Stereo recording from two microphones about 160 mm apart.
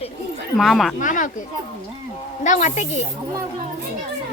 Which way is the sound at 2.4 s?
50° left (ahead or behind).